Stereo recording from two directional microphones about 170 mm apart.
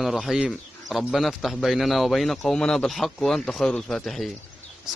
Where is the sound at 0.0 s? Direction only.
Centre (ahead or behind).